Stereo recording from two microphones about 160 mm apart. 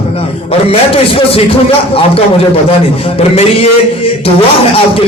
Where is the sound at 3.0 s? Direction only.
40° left (ahead or behind).